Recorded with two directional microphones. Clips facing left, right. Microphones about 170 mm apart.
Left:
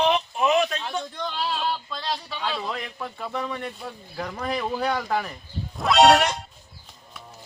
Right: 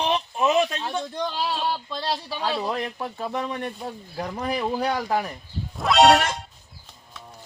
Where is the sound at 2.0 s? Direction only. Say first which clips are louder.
Right 2 dB; 35° right (ahead or behind).